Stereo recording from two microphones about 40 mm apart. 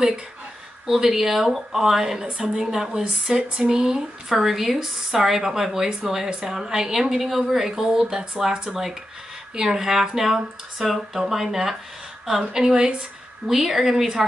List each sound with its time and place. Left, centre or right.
0.8 s speech: centre
2.9 s speech: right; by 8.2 s centre
9.6 s speech: centre